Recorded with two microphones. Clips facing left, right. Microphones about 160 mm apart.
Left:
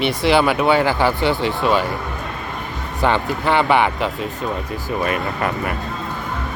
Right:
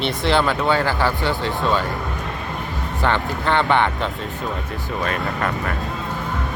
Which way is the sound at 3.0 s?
15° left (ahead or behind).